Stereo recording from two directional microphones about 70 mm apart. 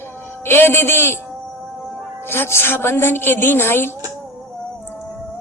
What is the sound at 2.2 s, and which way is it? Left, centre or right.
A woman's voice, left.